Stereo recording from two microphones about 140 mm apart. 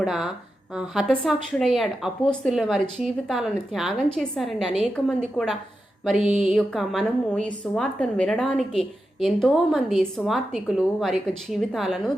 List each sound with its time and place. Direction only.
0.0 s a woman's voice: 5° right (ahead or behind)